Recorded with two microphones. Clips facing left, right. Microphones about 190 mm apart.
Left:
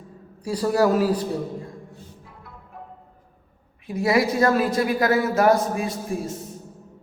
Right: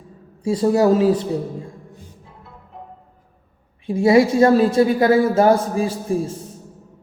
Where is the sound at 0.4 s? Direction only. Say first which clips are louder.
Right 4 dB; 25° right (ahead or behind).